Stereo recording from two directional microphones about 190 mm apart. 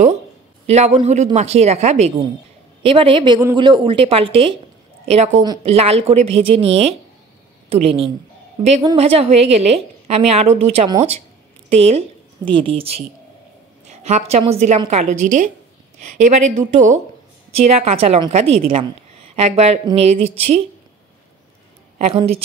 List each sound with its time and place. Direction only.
0.7 s a woman's voice: 35° right (ahead or behind)
13.8 s a sound: 35° right (ahead or behind)
14.9 s a woman's voice: 40° right (ahead or behind)
21.9 s a woman's voice: 30° right (ahead or behind)